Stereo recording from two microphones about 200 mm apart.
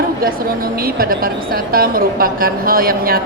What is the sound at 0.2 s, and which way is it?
Speech, 45° right (ahead or behind).